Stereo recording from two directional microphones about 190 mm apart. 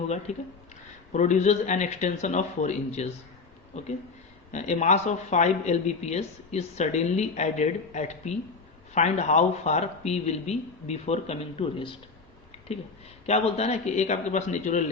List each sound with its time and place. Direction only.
0.3 s speech: 35° left (ahead or behind)
13.2 s speech: 35° left (ahead or behind)